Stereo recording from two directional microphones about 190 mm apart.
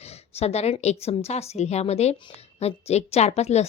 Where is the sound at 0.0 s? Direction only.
35° left (ahead or behind).